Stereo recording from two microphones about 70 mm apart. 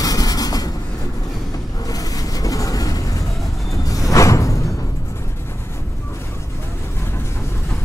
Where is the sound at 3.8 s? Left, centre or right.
Left.